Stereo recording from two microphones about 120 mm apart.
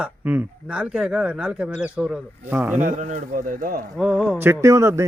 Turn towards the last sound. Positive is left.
turn(degrees=-25)  # may be behind; listen again after turning